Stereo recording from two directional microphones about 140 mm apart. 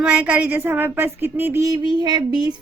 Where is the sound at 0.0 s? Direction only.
10° right (ahead or behind).